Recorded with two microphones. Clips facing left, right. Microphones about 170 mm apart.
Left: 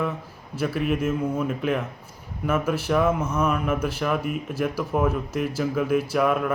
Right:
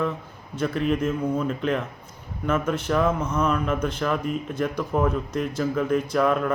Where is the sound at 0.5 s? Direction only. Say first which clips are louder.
Right 1 dB; 5° left (ahead or behind).